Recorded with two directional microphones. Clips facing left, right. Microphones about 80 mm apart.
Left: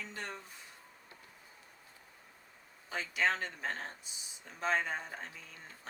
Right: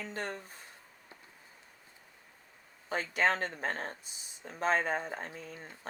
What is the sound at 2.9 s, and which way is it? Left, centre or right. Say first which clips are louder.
Speech: right 3 dB; right.